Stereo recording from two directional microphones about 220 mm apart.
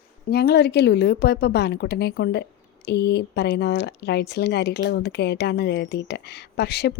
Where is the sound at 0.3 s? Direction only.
45° left (ahead or behind).